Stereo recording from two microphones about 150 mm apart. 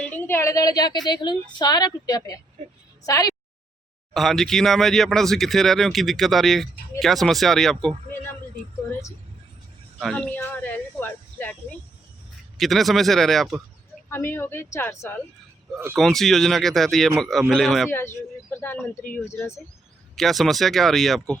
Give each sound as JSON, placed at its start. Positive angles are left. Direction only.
{"t": 0.0, "sound": "a woman's voice", "side_deg": 15}
{"t": 4.1, "sound": "speech", "side_deg": 0}
{"t": 10.0, "sound": "speech", "side_deg": 5}
{"t": 12.5, "sound": "speech", "side_deg": 0}
{"t": 14.1, "sound": "speech", "side_deg": 15}
{"t": 15.7, "sound": "speech", "side_deg": -15}
{"t": 16.0, "sound": "speech", "side_deg": 0}
{"t": 17.9, "sound": "speech", "side_deg": 15}
{"t": 20.1, "sound": "speech", "side_deg": 0}